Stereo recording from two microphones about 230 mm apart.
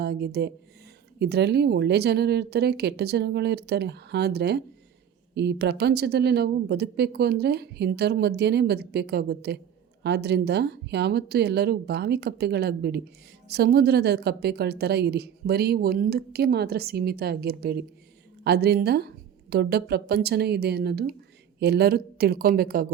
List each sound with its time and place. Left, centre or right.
0.0 s a woman's voice: right